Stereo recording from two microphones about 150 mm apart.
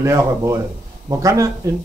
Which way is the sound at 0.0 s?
20° right (ahead or behind).